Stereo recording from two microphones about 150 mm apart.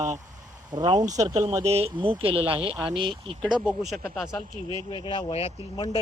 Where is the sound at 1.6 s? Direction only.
45° right (ahead or behind).